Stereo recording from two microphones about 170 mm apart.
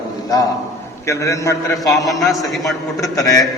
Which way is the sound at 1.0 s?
20° left (ahead or behind).